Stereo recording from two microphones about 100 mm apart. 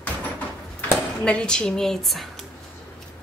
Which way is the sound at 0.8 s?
15° left (ahead or behind).